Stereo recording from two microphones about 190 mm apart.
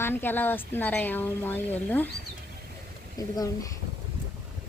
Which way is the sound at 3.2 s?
20° left (ahead or behind).